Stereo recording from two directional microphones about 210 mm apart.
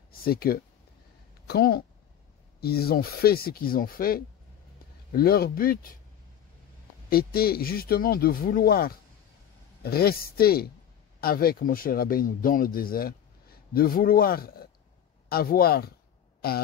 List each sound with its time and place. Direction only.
0.2 s speech: 45° left (ahead or behind)
7.1 s speech: 45° left (ahead or behind)
16.3 s a sound: 45° left (ahead or behind)